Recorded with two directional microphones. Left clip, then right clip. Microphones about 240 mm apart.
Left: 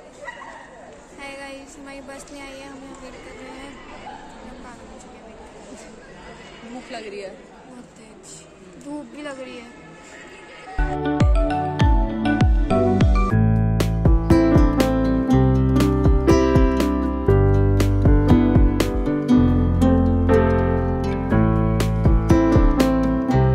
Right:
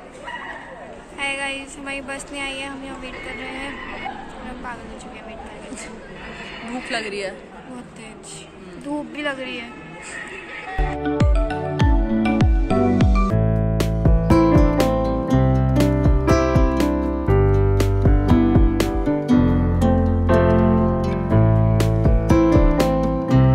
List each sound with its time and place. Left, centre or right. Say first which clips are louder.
1.2 s a woman's voice: right 10 dB; centre
6.9 s a woman's voice: right 7 dB; centre
9.1 s a woman's voice: right 7 dB; centre
11.0 s music: left 2 dB; centre